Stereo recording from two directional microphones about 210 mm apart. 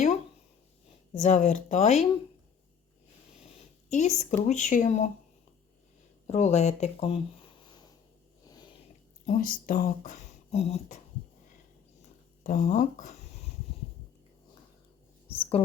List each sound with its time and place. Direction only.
1.1 s speech: 35° left (ahead or behind)
3.4 s speech: 35° left (ahead or behind)
6.2 s speech: 30° left (ahead or behind)
8.4 s a sound: 20° left (ahead or behind)
9.2 s speech: 40° left (ahead or behind)
12.4 s speech: 35° left (ahead or behind)
15.4 s speech: 25° left (ahead or behind)